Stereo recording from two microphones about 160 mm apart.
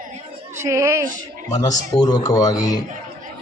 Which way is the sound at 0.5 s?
15° right (ahead or behind).